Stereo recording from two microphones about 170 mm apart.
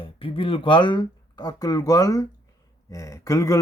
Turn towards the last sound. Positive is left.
turn(degrees=20)  # may be behind; listen again after turning